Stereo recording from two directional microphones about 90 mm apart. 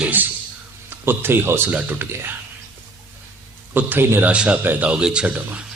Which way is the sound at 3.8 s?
20° right (ahead or behind).